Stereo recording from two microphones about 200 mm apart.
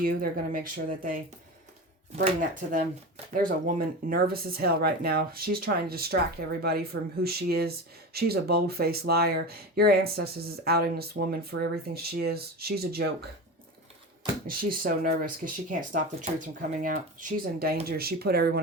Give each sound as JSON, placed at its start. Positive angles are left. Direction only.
{"t": 0.0, "sound": "speech", "side_deg": -45}
{"t": 2.2, "sound": "speech", "side_deg": -40}
{"t": 14.4, "sound": "speech", "side_deg": -45}